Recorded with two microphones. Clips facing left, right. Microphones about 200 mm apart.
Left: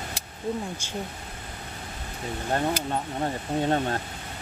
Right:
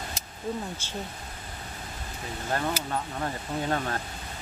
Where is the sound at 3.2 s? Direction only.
25° left (ahead or behind).